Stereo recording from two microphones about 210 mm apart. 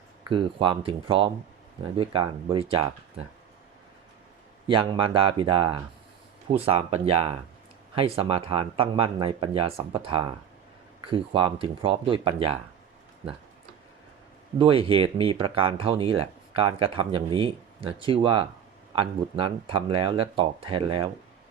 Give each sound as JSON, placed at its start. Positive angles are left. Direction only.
{"t": 0.3, "sound": "speech", "side_deg": -25}
{"t": 4.7, "sound": "speech", "side_deg": -25}
{"t": 14.6, "sound": "speech", "side_deg": -25}